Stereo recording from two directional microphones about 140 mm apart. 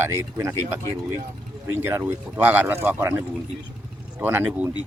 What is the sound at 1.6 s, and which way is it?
Speech, 20° right (ahead or behind).